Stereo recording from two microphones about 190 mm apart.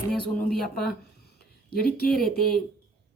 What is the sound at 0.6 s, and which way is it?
Speech, 55° left (ahead or behind).